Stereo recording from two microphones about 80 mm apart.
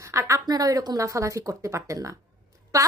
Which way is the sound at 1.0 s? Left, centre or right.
Right.